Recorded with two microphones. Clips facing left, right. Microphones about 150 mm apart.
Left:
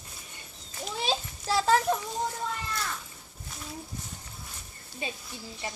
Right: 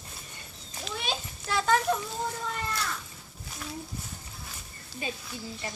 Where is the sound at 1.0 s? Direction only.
30° left (ahead or behind).